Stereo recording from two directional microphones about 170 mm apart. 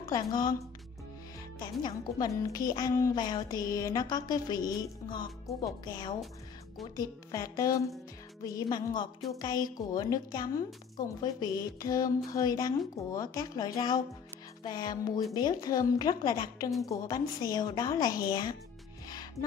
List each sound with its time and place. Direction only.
0.1 s a woman's voice: 25° left (ahead or behind)
1.6 s a woman's voice: 25° left (ahead or behind)